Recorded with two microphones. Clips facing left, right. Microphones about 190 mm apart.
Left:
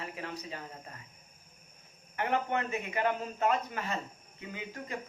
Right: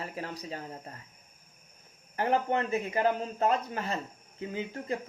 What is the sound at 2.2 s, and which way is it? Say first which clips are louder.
Speech: right 4 dB; 35° right (ahead or behind).